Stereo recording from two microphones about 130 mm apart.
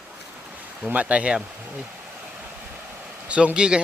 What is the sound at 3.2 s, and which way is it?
Speech, 10° right (ahead or behind).